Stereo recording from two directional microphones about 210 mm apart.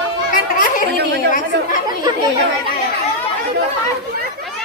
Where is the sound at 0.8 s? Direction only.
50° right (ahead or behind).